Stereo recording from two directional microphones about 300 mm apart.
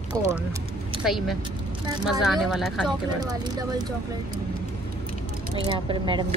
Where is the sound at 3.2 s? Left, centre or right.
Centre.